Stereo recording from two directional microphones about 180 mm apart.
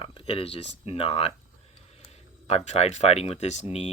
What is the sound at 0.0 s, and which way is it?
Speech, 30° left (ahead or behind).